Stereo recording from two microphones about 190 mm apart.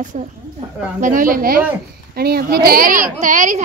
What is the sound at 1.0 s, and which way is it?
A woman's voice, 45° right (ahead or behind).